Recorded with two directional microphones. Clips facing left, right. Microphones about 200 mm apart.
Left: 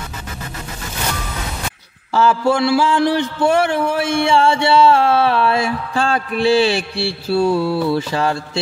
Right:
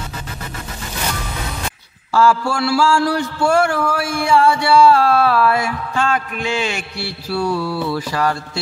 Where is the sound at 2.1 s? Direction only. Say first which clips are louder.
Left 1 dB; 20° left (ahead or behind).